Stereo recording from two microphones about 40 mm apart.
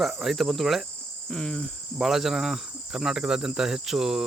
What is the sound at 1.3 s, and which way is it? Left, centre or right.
Cricket, centre.